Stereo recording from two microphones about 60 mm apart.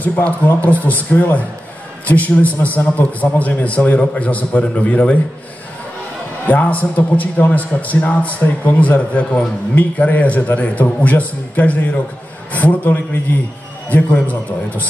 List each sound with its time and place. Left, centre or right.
0.0 s a man's voice: left
6.4 s a man's voice: left